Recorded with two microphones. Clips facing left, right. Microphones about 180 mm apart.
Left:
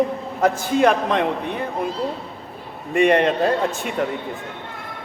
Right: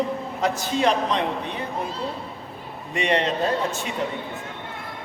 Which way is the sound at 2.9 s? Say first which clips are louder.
Left 7 dB; 50° left (ahead or behind).